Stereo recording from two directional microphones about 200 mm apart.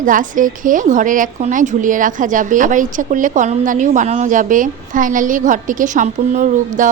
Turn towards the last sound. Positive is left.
turn(degrees=-40)  # may be behind; listen again after turning